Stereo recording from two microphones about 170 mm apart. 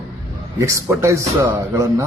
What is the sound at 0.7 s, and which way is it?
Speech, 15° right (ahead or behind).